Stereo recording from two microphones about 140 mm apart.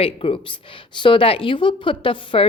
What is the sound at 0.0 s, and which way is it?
Speech, 40° left (ahead or behind).